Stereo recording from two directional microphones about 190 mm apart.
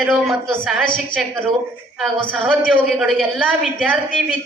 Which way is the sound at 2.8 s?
Centre (ahead or behind).